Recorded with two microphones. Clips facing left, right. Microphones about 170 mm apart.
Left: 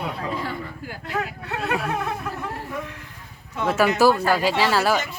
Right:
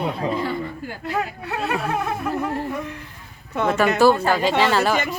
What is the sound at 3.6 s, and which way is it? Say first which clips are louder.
Speech: right 3 dB; 65° right (ahead or behind).